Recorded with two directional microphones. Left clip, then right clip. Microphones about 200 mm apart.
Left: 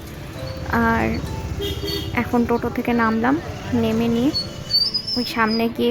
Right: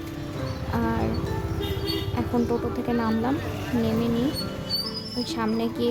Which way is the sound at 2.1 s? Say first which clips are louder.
Left 7 dB; 20° left (ahead or behind).